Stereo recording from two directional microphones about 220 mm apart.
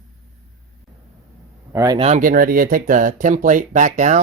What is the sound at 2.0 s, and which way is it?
Speech, 30° right (ahead or behind).